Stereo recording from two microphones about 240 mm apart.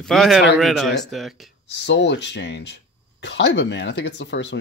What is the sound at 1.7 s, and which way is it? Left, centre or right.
Speech, left.